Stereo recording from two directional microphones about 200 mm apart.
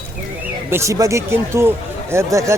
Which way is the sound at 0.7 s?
15° right (ahead or behind).